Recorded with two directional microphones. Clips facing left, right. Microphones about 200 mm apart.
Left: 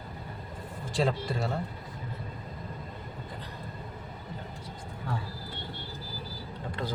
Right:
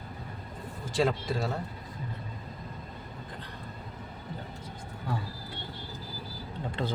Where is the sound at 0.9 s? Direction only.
Centre (ahead or behind).